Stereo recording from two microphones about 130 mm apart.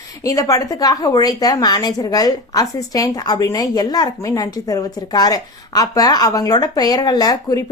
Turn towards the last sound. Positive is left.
turn(degrees=30)  # may be behind; listen again after turning